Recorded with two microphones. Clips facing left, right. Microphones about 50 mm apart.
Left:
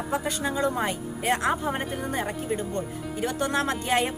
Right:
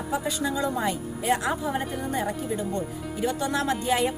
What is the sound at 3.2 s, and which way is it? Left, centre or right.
Speech, left.